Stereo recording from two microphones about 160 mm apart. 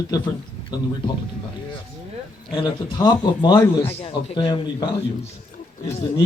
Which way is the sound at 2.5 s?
30° left (ahead or behind).